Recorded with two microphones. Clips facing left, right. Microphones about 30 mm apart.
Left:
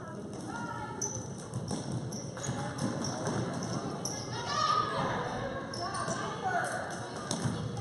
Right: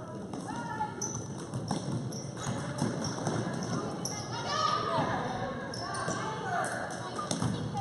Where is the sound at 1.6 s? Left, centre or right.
Centre.